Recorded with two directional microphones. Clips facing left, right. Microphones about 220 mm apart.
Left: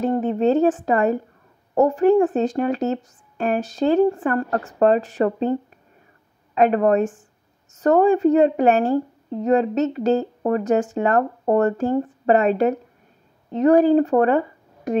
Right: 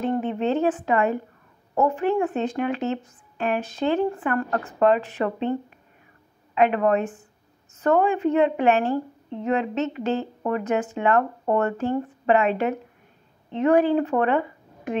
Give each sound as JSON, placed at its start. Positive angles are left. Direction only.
{"t": 0.0, "sound": "a woman's voice", "side_deg": 40}